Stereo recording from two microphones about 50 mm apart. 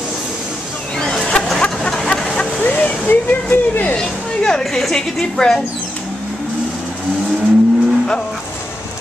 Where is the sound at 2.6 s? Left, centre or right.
Left.